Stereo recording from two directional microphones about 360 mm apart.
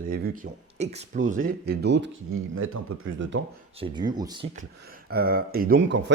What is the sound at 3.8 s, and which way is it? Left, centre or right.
Speech, centre.